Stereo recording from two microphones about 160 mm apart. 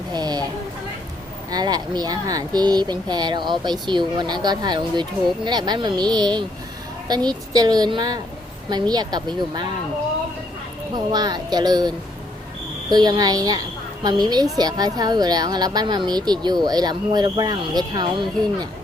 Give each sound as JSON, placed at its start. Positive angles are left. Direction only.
{"t": 0.1, "sound": "a sound", "side_deg": -25}
{"t": 1.5, "sound": "speech", "side_deg": -25}
{"t": 10.9, "sound": "speech", "side_deg": -25}